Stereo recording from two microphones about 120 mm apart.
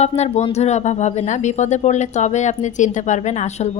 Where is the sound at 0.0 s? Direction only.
65° left (ahead or behind).